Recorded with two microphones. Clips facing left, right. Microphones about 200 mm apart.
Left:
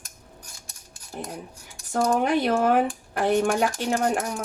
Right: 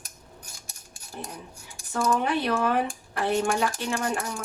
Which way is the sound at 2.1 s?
45° left (ahead or behind).